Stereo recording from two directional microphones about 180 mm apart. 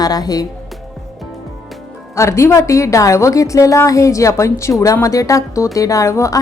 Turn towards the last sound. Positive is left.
turn(degrees=15)  # may be behind; listen again after turning